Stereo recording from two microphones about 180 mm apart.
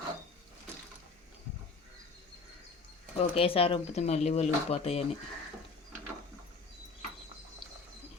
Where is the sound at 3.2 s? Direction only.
35° left (ahead or behind).